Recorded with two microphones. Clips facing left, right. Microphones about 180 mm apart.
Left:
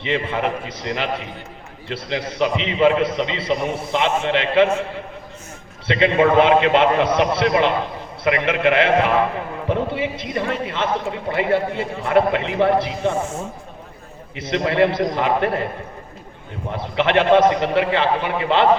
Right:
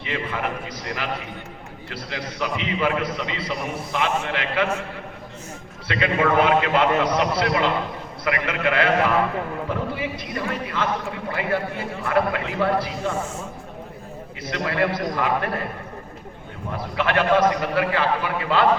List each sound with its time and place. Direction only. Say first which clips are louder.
0.0 s a man's voice: left 6 dB; 25° left (ahead or behind)
5.9 s a man's voice: left 5 dB; 25° left (ahead or behind)
14.3 s a man's voice: left 6 dB; 25° left (ahead or behind)
16.7 s a man's voice: left 5 dB; 25° left (ahead or behind)